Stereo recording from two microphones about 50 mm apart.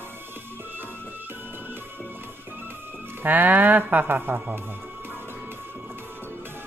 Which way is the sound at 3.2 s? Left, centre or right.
Right.